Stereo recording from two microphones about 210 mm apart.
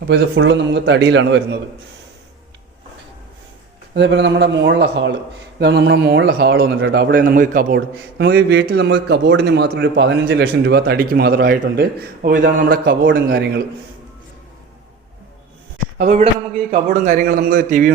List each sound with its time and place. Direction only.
0.1 s a man's voice: 60° right (ahead or behind)
3.9 s a man's voice: 55° right (ahead or behind)
16.0 s a man's voice: 35° right (ahead or behind)